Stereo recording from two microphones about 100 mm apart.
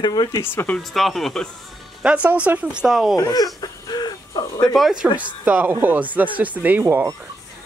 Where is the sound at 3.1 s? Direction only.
40° left (ahead or behind).